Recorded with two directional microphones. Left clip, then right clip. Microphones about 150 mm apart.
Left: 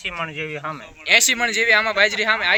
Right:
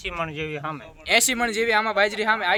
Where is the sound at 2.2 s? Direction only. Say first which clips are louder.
Left 3 dB; 90° right.